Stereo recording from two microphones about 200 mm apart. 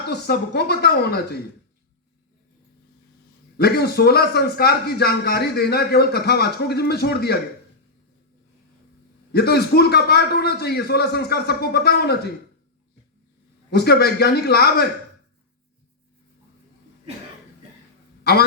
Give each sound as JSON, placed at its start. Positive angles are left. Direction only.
{"t": 0.0, "sound": "a man's voice", "side_deg": 55}
{"t": 3.6, "sound": "a man's voice", "side_deg": 50}
{"t": 9.3, "sound": "a man's voice", "side_deg": 55}
{"t": 13.7, "sound": "a man's voice", "side_deg": 55}
{"t": 18.2, "sound": "a sound", "side_deg": 50}